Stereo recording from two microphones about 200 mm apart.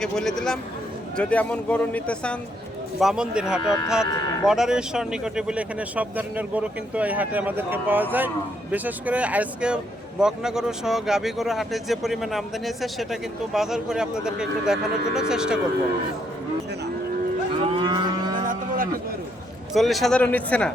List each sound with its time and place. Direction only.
0.0 s a man's voice: centre (ahead or behind)
17.7 s livestock: 25° right (ahead or behind)
19.7 s speech: centre (ahead or behind)